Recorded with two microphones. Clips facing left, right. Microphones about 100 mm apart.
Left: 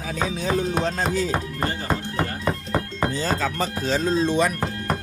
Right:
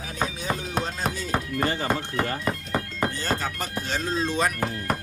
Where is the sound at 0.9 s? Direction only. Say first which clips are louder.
Left 6 dB; 90° left.